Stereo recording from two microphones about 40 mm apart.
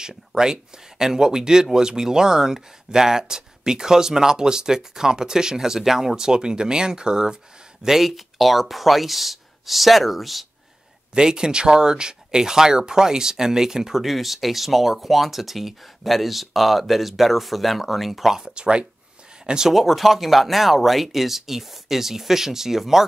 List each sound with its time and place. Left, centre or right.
0.4 s speech: centre
7.8 s speech: centre
11.1 s speech: centre
18.3 s speech: right
19.7 s speech: centre